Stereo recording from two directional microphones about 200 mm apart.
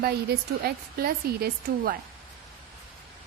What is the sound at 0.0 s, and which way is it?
A woman's voice, 50° right (ahead or behind).